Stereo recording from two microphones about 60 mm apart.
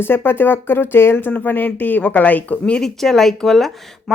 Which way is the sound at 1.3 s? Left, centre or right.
Left.